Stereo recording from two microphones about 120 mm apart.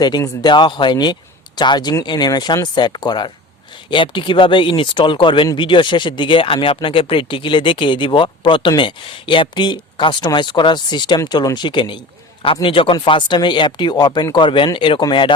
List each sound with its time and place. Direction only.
0.4 s speech: 40° left (ahead or behind)